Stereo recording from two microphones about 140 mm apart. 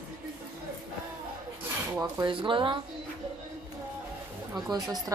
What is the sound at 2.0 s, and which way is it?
Speech, 30° right (ahead or behind).